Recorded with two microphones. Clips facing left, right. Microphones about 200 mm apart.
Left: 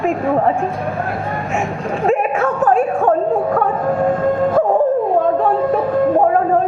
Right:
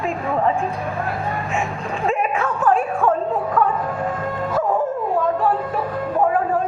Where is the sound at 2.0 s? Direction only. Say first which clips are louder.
Left 5 dB; 45° left (ahead or behind).